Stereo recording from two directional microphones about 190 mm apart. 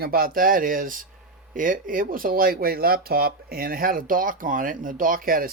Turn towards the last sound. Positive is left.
turn(degrees=-50)  # may be behind; listen again after turning